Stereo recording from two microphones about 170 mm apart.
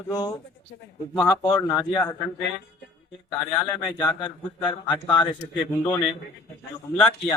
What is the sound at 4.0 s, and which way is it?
Speech, 25° left (ahead or behind).